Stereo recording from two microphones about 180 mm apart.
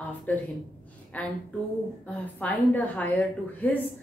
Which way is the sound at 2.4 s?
10° left (ahead or behind).